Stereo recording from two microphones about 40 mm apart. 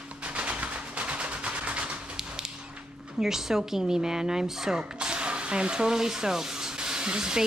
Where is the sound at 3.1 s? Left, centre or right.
Centre.